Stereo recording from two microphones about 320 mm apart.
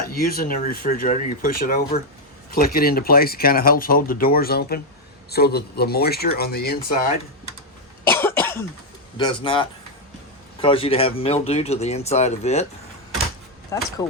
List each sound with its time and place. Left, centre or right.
0.0 s speech: left
8.0 s cough: centre
9.1 s speech: centre
13.7 s speech: centre